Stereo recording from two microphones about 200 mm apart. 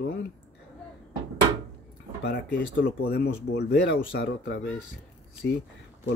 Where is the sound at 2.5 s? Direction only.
65° left (ahead or behind).